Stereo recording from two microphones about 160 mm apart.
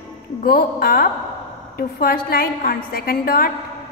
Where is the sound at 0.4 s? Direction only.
70° left (ahead or behind).